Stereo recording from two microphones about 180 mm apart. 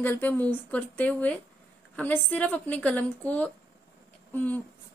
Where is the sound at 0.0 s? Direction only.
10° left (ahead or behind).